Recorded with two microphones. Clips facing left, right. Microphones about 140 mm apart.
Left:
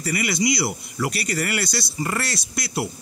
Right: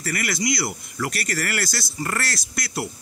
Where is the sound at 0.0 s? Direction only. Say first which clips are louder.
Left 3 dB; centre (ahead or behind).